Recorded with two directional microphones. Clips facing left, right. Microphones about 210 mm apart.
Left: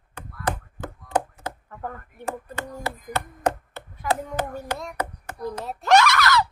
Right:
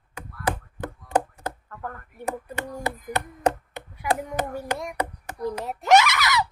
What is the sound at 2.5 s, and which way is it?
Speech, 15° right (ahead or behind).